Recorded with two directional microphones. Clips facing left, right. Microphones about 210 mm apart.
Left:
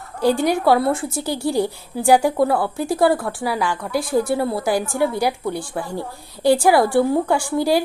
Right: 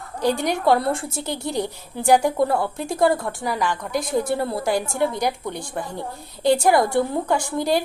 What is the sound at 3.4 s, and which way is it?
A woman's voice, 10° left (ahead or behind).